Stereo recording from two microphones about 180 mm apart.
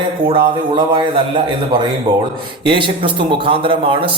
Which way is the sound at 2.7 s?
25° right (ahead or behind).